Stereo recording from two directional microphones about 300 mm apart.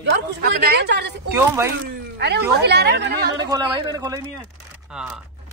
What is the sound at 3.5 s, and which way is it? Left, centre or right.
A man's voice, centre.